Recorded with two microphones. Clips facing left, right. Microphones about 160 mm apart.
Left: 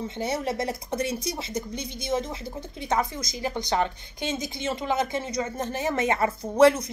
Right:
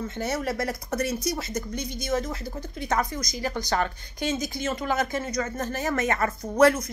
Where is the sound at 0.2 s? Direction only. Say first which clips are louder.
Even; 25° left (ahead or behind).